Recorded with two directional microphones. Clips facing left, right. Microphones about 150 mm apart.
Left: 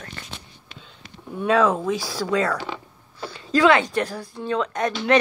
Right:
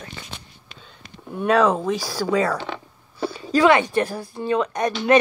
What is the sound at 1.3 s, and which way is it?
A woman's voice, 10° right (ahead or behind).